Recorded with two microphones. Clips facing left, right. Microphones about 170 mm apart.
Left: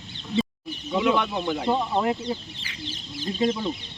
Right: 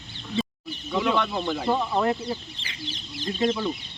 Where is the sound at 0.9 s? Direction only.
15° left (ahead or behind).